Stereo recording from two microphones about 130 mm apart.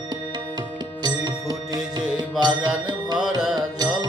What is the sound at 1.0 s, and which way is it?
Music, 30° right (ahead or behind).